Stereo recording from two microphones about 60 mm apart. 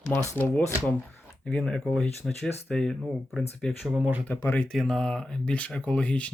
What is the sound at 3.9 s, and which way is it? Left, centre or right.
Speech, right.